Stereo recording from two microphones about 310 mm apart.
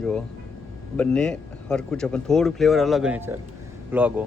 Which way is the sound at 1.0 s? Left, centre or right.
Centre.